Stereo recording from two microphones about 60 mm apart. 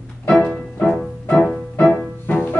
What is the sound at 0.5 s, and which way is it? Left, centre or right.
Music, centre.